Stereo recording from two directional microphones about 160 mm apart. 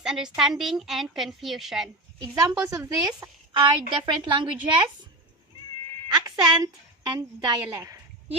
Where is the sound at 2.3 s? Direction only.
15° right (ahead or behind).